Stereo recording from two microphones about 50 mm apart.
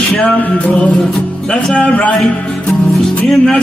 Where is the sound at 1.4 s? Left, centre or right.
Centre.